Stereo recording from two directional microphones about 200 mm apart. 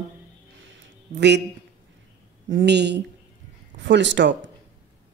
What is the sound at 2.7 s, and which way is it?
Speech, 60° right (ahead or behind).